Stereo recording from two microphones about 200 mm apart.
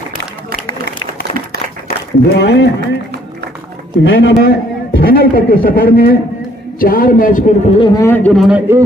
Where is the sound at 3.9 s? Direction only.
70° left (ahead or behind).